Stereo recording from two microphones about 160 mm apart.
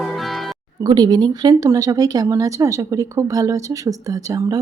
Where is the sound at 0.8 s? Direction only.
25° right (ahead or behind).